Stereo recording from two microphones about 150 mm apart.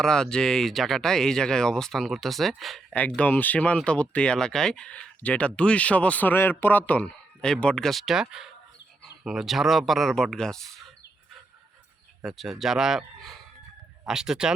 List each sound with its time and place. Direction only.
0.0 s speech: 5° left (ahead or behind)
12.2 s speech: centre (ahead or behind)